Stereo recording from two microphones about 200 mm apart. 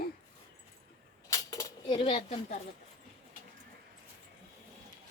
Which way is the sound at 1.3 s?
15° left (ahead or behind).